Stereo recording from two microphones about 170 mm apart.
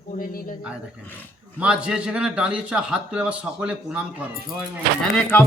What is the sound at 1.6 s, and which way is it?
A man's voice, 5° right (ahead or behind).